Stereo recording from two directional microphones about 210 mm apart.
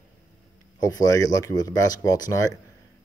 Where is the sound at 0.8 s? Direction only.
15° left (ahead or behind).